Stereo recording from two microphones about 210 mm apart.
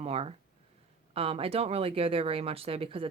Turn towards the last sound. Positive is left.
turn(degrees=-25)  # may be behind; listen again after turning